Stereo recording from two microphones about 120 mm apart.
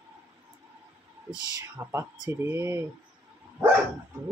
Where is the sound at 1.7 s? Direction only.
20° right (ahead or behind).